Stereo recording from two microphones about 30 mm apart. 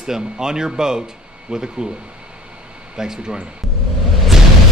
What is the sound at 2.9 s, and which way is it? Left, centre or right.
Speech, centre.